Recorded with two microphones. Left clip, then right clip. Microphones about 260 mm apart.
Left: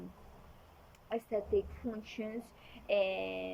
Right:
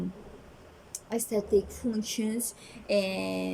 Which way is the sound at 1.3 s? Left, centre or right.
Centre.